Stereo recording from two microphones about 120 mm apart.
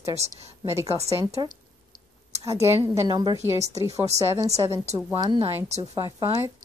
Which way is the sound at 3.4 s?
20° right (ahead or behind).